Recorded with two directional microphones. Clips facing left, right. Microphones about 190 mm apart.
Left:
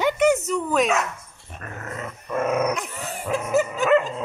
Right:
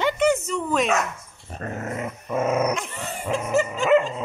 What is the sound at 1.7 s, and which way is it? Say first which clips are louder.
Dog: right 3 dB; 20° right (ahead or behind).